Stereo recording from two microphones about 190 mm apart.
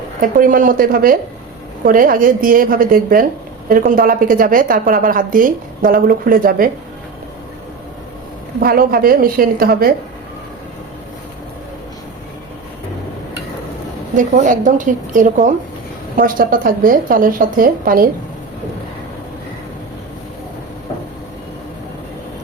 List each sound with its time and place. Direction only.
0.2 s a woman's voice: 45° right (ahead or behind)
8.6 s a woman's voice: 50° right (ahead or behind)
14.2 s a woman's voice: 45° right (ahead or behind)